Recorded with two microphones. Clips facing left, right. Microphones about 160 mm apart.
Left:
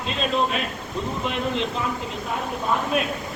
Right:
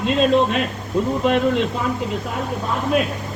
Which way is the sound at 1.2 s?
55° right (ahead or behind).